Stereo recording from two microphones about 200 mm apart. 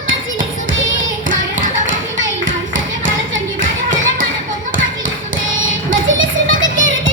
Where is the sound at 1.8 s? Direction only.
70° right (ahead or behind).